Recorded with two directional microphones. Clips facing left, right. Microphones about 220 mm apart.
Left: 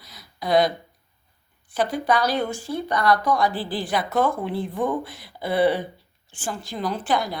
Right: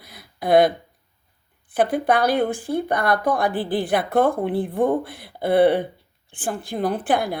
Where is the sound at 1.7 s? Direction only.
55° right (ahead or behind).